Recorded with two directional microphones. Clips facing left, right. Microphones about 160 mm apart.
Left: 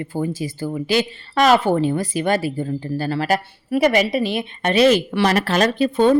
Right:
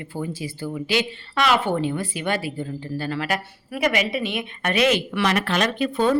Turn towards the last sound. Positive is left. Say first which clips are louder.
# left 5 dB
turn(degrees=25)  # may be behind; listen again after turning